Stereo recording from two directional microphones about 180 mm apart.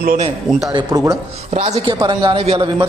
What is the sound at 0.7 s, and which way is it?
Speech, 25° right (ahead or behind).